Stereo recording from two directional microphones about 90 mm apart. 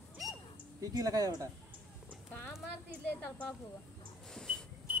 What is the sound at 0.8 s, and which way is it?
Speech, 45° right (ahead or behind).